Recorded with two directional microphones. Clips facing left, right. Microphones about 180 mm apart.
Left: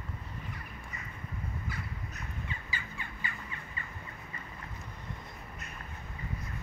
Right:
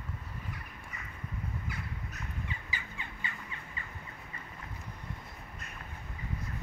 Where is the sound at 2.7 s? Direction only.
20° right (ahead or behind).